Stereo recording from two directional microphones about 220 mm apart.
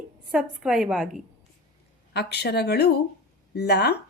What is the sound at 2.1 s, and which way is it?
Speech, 50° left (ahead or behind).